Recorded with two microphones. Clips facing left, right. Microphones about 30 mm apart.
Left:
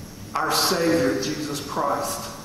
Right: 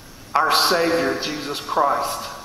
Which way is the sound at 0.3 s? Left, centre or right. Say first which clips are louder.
Right 5 dB; right.